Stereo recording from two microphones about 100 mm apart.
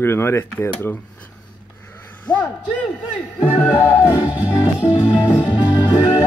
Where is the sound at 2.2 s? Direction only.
15° left (ahead or behind).